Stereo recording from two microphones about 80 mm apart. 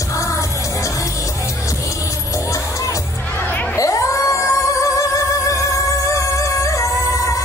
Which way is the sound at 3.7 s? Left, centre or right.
Left.